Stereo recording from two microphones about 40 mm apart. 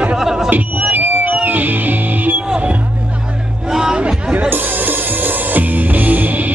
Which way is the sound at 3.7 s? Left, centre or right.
Centre.